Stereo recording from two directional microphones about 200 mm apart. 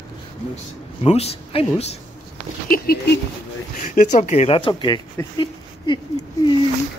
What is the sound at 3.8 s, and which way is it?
Speech, 40° left (ahead or behind).